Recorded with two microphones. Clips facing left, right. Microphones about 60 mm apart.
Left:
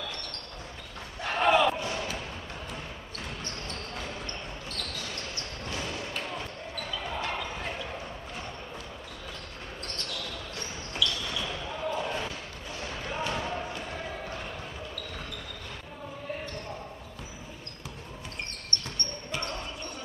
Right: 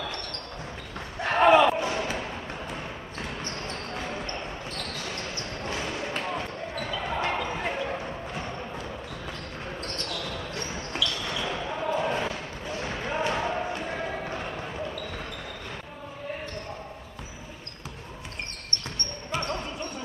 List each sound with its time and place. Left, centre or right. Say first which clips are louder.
1.2 s slam: right 5 dB; right
5.1 s basketball bounce: right 4 dB; right
10.9 s basketball bounce: even; right